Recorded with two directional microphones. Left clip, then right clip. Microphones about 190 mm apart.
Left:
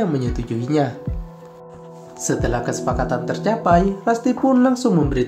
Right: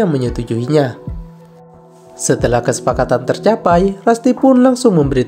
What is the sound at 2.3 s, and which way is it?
A woman's voice, 50° right (ahead or behind).